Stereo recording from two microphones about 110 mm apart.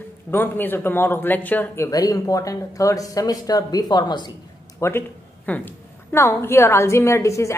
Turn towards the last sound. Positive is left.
turn(degrees=25)  # may be behind; listen again after turning